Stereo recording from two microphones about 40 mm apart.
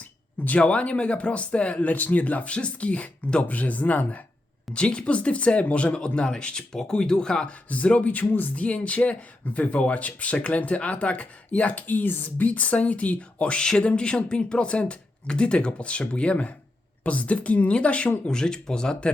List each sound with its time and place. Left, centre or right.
0.4 s speech: left
3.4 s speech: left
4.7 s speech: left
7.7 s speech: left
8.2 s speech: left
8.5 s speech: left
13.6 s speech: centre
18.3 s speech: centre